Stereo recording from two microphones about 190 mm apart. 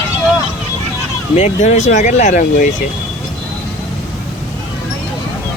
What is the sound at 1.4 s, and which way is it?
Speech, 40° left (ahead or behind).